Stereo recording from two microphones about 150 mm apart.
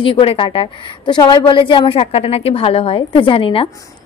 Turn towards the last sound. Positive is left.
turn(degrees=35)  # may be behind; listen again after turning